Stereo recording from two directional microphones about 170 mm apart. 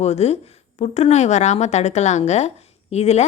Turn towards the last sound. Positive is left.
turn(degrees=40)  # may be behind; listen again after turning